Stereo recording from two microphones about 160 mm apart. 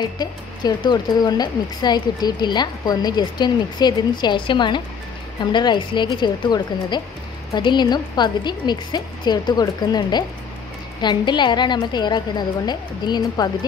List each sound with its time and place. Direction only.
0.0 s speech: 25° left (ahead or behind)